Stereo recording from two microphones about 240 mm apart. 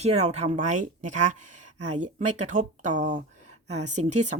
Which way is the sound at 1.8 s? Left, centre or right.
Right.